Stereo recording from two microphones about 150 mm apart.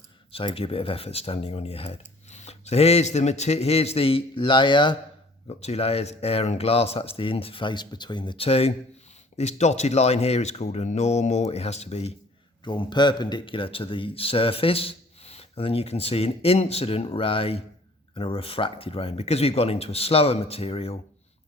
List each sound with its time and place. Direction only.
0.3 s speech: 40° left (ahead or behind)
5.5 s speech: 40° left (ahead or behind)
12.6 s speech: 30° left (ahead or behind)